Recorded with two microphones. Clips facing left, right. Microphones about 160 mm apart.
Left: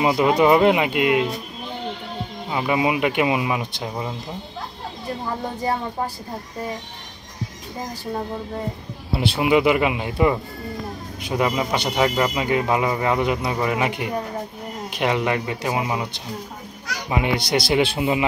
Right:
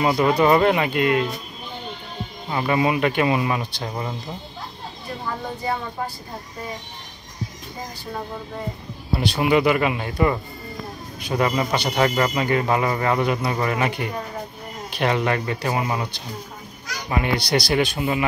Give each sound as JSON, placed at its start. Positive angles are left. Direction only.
{"t": 0.0, "sound": "speech", "side_deg": 15}
{"t": 2.5, "sound": "speech", "side_deg": 15}
{"t": 9.4, "sound": "speech", "side_deg": 15}